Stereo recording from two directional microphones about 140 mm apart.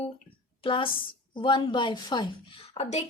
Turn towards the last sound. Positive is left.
turn(degrees=55)  # may be behind; listen again after turning